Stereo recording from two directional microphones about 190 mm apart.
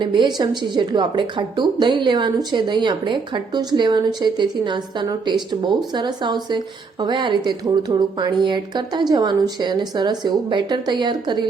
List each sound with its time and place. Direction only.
0.0 s a woman's voice: 25° right (ahead or behind)